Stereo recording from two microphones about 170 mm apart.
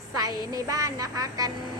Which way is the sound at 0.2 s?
20° right (ahead or behind).